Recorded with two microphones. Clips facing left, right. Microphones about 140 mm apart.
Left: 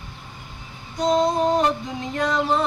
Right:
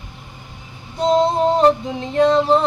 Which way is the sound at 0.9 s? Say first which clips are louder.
Right 3 dB; 30° right (ahead or behind).